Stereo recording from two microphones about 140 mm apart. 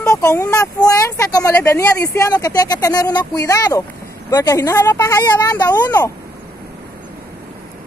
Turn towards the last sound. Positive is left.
turn(degrees=30)  # may be behind; listen again after turning